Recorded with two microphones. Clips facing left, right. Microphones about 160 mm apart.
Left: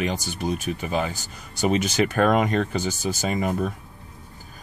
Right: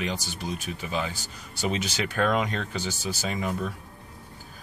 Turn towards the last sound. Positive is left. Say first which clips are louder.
# left 5 dB
turn(degrees=55)  # may be behind; listen again after turning